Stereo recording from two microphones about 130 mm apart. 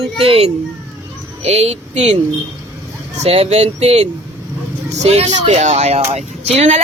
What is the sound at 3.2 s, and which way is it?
Speech, 50° right (ahead or behind).